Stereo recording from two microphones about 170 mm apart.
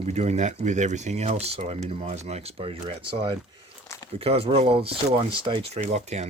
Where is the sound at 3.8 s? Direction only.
20° left (ahead or behind).